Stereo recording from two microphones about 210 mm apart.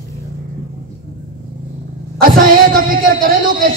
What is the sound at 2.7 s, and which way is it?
Speech, 40° right (ahead or behind).